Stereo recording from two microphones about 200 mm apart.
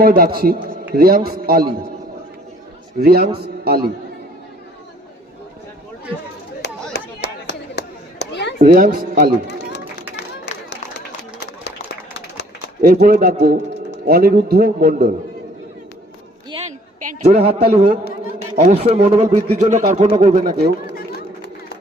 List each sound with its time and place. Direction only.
0.0 s a man's voice: 50° right (ahead or behind)
3.0 s a man's voice: 50° right (ahead or behind)
6.9 s a sound: 60° left (ahead or behind)
8.5 s a man's voice: 40° right (ahead or behind)
12.8 s a man's voice: 45° right (ahead or behind)
17.0 s a man's voice: 30° right (ahead or behind)